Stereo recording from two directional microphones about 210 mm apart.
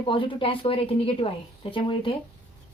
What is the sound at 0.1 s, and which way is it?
A woman's voice, 25° left (ahead or behind).